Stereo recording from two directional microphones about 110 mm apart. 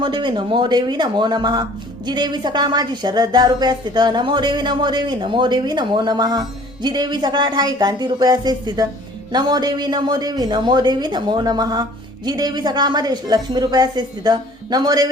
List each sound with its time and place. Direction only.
0.0 s speech: 45° right (ahead or behind)